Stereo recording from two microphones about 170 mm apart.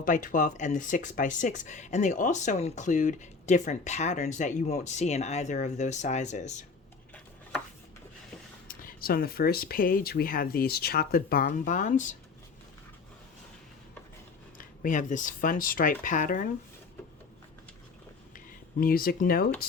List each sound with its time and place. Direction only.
0.0 s speech: 50° left (ahead or behind)
8.6 s speech: 60° left (ahead or behind)
14.6 s speech: 50° left (ahead or behind)
18.3 s speech: 60° left (ahead or behind)